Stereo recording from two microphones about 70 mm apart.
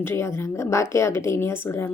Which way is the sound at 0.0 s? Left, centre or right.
Left.